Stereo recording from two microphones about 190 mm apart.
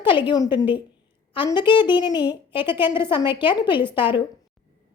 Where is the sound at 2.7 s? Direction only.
10° right (ahead or behind).